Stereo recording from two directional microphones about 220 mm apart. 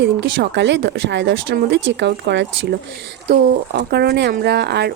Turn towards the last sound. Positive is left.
turn(degrees=-50)  # may be behind; listen again after turning